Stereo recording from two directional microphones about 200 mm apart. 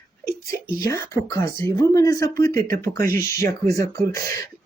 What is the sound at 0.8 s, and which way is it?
Speech, 15° left (ahead or behind).